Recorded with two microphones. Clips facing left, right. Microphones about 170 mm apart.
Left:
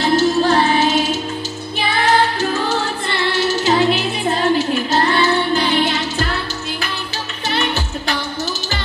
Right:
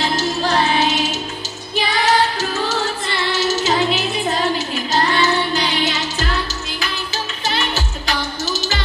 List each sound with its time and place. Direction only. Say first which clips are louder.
0.1 s music: left 5 dB; 55° left (ahead or behind)
3.3 s music: left 2 dB; 55° left (ahead or behind)
7.4 s music: left 3 dB; 60° left (ahead or behind)